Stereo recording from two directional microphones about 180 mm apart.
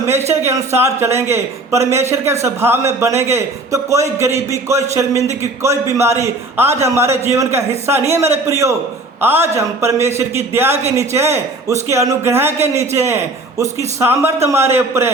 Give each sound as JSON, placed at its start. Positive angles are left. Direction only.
{"t": 0.4, "sound": "a man's voice", "side_deg": -15}